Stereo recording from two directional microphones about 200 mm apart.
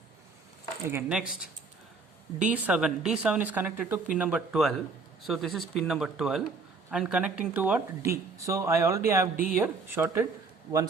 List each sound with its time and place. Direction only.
0.9 s speech: 10° right (ahead or behind)
2.4 s speech: 5° right (ahead or behind)
9.3 s speech: 45° right (ahead or behind)
9.6 s speech: 10° right (ahead or behind)